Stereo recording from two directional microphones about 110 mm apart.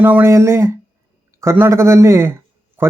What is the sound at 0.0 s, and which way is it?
Speech, 20° right (ahead or behind).